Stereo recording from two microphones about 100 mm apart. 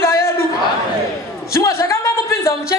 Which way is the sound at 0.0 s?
25° left (ahead or behind).